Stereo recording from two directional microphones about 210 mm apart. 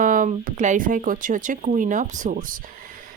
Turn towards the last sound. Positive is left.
turn(degrees=-40)  # may be behind; listen again after turning